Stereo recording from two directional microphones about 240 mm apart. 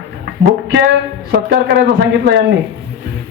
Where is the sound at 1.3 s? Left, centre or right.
Right.